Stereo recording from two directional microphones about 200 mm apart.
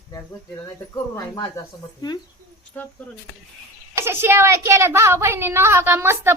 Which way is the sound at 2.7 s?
10° left (ahead or behind).